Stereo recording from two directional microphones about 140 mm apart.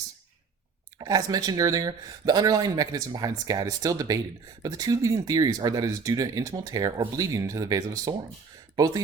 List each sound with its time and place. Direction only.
0.9 s speech: 25° right (ahead or behind)